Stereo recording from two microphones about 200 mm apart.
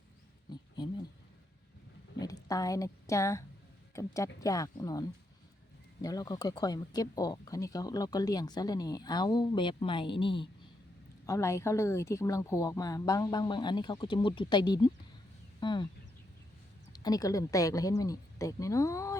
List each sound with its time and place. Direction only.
0.5 s a sound: 20° left (ahead or behind)
2.1 s a woman's voice: 20° left (ahead or behind)
11.3 s a woman's voice: 15° left (ahead or behind)
16.9 s a woman's voice: 20° left (ahead or behind)